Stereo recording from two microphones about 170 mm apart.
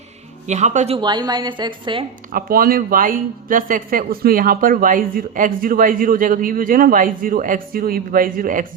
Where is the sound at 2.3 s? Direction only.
60° right (ahead or behind).